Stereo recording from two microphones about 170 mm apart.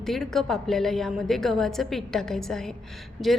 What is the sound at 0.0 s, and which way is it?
A woman's voice, centre (ahead or behind).